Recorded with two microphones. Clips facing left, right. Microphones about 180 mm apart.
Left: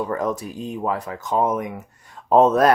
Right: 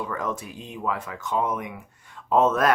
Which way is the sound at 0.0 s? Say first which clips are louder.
Left 6 dB; 40° left (ahead or behind).